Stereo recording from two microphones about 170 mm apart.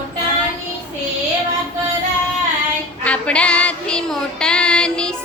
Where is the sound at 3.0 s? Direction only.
5° left (ahead or behind).